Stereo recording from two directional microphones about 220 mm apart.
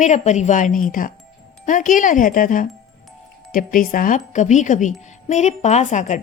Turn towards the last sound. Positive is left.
turn(degrees=35)  # may be behind; listen again after turning